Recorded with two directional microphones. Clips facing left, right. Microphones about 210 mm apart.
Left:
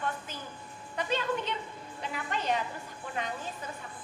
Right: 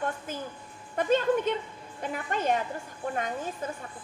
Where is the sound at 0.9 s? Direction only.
50° right (ahead or behind).